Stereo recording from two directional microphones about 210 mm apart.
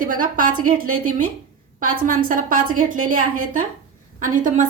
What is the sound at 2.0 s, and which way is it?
A woman's voice, 40° right (ahead or behind).